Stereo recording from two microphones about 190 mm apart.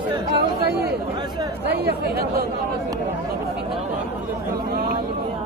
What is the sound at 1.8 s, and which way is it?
Speech, 55° right (ahead or behind).